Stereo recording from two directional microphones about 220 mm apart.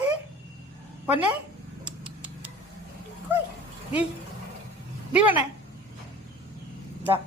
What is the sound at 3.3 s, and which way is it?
Dog, 10° right (ahead or behind).